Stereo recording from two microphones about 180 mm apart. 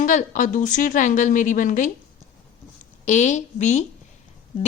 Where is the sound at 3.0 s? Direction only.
40° left (ahead or behind).